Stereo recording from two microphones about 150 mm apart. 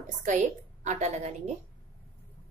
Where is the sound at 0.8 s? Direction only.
50° right (ahead or behind).